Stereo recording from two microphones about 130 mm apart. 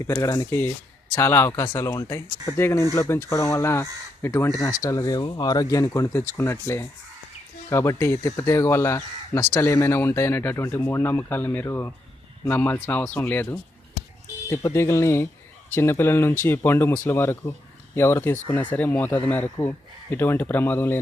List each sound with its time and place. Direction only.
0.0 s speech: 25° left (ahead or behind)